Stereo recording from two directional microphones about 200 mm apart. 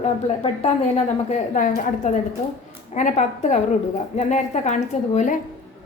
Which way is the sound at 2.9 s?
35° left (ahead or behind).